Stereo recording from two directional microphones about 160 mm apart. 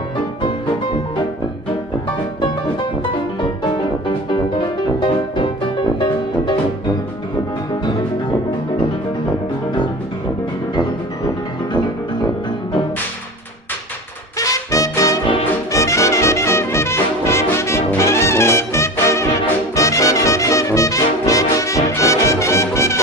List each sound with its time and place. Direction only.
4.3 s music: 30° left (ahead or behind)
14.4 s music: 20° left (ahead or behind)